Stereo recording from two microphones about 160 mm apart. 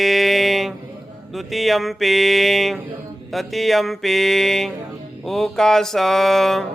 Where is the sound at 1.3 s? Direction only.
Centre (ahead or behind).